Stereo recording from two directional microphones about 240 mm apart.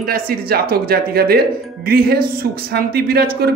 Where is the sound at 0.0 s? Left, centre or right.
Right.